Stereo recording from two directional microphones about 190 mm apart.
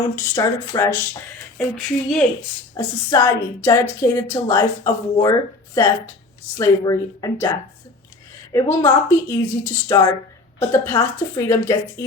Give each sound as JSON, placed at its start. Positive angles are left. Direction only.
{"t": 0.2, "sound": "a woman's voice", "side_deg": 20}
{"t": 1.5, "sound": "speech", "side_deg": 0}
{"t": 2.7, "sound": "a woman's voice", "side_deg": 15}
{"t": 8.5, "sound": "a woman's voice", "side_deg": 15}